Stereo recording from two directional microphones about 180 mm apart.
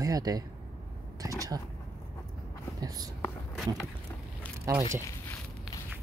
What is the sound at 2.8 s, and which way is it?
Speech, 20° right (ahead or behind).